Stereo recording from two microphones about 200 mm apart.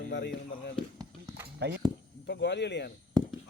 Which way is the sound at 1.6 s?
55° right (ahead or behind).